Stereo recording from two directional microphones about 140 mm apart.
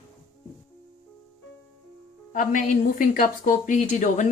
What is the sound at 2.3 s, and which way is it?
Speech, 70° left (ahead or behind).